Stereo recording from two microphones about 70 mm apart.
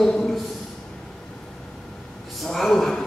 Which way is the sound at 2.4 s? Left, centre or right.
Centre.